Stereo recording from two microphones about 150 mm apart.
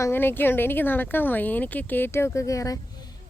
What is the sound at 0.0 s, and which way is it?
Speech, 15° left (ahead or behind).